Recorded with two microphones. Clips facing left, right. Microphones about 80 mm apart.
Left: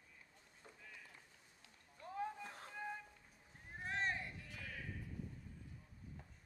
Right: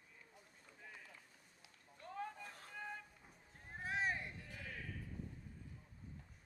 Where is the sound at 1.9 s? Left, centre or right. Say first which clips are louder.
Left 3 dB; centre.